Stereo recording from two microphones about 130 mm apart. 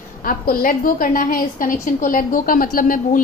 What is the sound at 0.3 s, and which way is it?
A woman's voice, 90° left.